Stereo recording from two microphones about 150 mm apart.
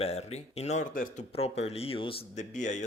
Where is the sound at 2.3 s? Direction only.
55° left (ahead or behind).